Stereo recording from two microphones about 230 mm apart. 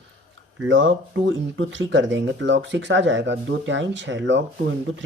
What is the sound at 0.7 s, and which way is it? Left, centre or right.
Speech, right.